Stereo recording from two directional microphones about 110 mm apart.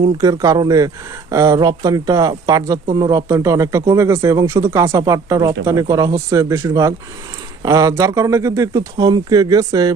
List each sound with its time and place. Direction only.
0.2 s speech: 35° right (ahead or behind)